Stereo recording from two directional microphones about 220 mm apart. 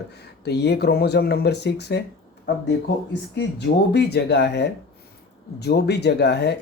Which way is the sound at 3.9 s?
50° left (ahead or behind).